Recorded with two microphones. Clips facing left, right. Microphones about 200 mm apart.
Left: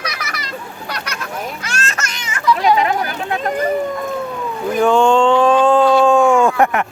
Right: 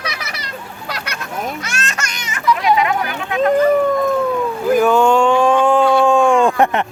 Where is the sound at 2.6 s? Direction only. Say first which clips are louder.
Left 1 dB; 35° left (ahead or behind).